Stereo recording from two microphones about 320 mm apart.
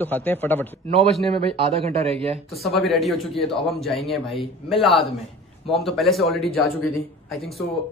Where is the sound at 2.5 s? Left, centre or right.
Centre.